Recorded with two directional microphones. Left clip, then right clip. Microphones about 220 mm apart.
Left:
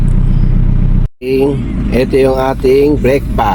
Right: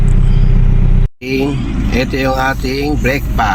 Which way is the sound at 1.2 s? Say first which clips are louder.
Left 5 dB; 10° left (ahead or behind).